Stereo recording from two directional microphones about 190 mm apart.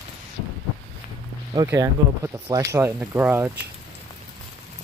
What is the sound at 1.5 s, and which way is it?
Speech, 20° right (ahead or behind).